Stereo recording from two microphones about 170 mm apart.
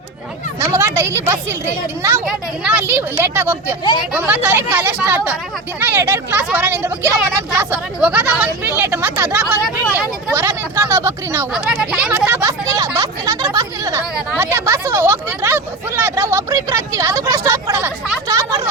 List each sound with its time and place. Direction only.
0.6 s speech: 15° right (ahead or behind)
10.3 s speech: 15° right (ahead or behind)
11.5 s speech: 5° right (ahead or behind)